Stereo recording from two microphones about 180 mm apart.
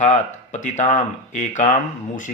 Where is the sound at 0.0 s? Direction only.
40° left (ahead or behind).